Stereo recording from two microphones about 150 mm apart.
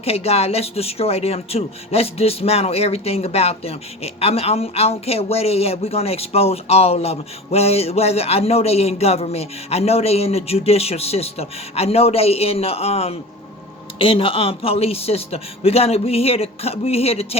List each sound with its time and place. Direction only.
0.0 s a man's voice: 40° left (ahead or behind)